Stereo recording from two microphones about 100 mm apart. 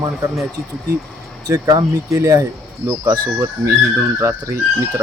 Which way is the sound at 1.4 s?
40° right (ahead or behind).